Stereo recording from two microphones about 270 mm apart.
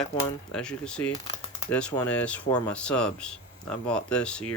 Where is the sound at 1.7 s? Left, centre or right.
Centre.